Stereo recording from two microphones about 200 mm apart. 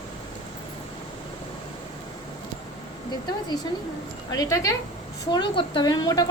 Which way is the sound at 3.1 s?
20° left (ahead or behind).